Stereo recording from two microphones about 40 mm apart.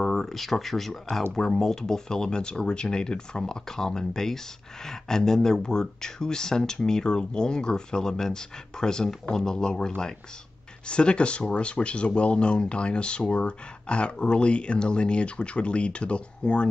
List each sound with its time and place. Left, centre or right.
0.0 s speech: centre; by 16.6 s left